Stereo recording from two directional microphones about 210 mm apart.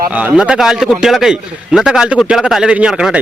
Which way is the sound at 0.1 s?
5° right (ahead or behind).